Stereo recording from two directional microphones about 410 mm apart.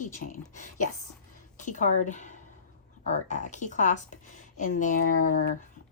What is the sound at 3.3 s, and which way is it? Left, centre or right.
Speech, centre.